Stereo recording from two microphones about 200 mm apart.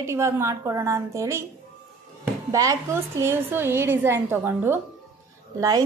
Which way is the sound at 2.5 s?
15° right (ahead or behind).